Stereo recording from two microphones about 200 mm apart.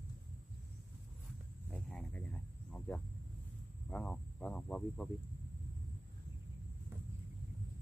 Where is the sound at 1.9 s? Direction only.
5° left (ahead or behind).